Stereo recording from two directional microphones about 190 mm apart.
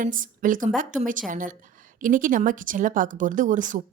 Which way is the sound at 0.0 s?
45° right (ahead or behind).